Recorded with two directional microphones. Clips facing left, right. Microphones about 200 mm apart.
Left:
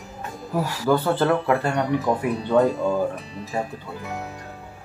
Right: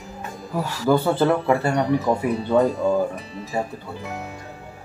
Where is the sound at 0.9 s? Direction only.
10° right (ahead or behind).